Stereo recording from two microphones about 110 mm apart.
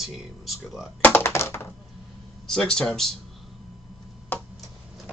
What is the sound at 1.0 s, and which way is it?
Speech, 20° left (ahead or behind).